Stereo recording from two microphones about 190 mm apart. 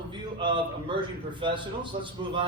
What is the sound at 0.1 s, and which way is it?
A man's voice, 25° right (ahead or behind).